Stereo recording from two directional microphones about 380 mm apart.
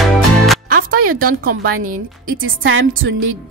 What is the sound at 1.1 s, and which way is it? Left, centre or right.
A woman's voice, right.